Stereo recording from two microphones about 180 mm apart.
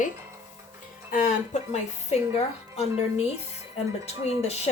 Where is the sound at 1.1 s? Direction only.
45° left (ahead or behind).